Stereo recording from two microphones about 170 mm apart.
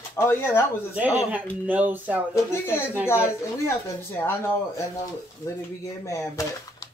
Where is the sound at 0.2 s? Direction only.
15° left (ahead or behind).